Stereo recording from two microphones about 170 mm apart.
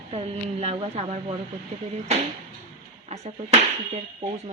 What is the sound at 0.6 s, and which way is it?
Speech, 40° right (ahead or behind).